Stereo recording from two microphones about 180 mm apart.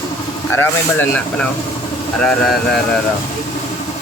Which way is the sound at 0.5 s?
10° left (ahead or behind).